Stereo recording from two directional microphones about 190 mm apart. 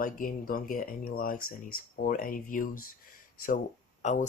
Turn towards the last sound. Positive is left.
turn(degrees=40)  # may be behind; listen again after turning